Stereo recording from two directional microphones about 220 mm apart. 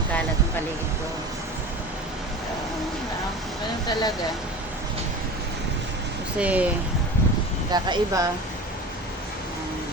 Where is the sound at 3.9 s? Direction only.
20° left (ahead or behind).